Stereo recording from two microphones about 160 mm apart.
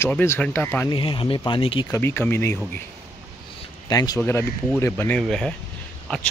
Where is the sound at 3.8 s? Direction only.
25° left (ahead or behind); by 5.5 s 5° left (ahead or behind).